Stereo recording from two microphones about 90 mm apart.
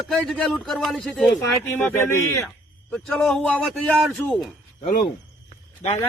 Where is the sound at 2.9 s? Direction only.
5° left (ahead or behind).